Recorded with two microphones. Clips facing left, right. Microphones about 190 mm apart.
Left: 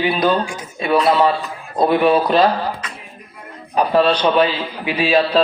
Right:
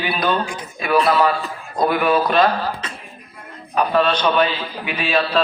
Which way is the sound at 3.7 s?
30° left (ahead or behind).